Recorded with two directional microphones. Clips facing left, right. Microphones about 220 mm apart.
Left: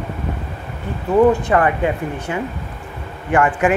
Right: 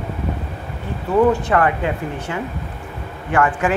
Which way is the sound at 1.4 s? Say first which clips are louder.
Left 1 dB; 15° left (ahead or behind).